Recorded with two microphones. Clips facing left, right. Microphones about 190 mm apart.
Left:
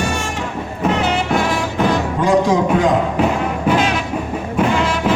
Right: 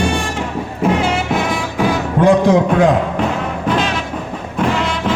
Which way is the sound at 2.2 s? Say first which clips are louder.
Right 5 dB; 60° right (ahead or behind).